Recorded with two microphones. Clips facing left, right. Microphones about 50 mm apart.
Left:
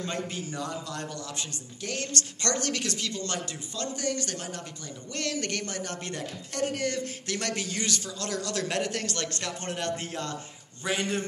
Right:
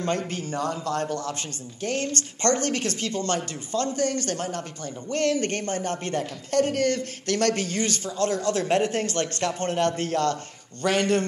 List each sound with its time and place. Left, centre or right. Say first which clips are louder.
0.3 s a man's voice: right 6 dB; right